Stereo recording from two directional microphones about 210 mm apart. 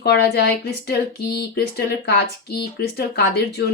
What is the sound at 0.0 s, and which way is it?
Speech, 50° left (ahead or behind).